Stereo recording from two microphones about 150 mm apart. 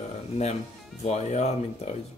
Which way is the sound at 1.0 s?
45° left (ahead or behind).